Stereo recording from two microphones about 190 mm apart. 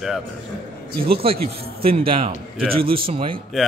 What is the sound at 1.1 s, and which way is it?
A man's voice, 30° right (ahead or behind).